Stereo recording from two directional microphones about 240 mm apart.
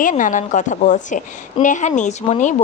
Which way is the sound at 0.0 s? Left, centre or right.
Left.